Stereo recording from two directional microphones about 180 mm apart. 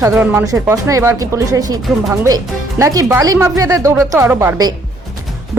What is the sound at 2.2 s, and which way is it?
Speech, 20° right (ahead or behind).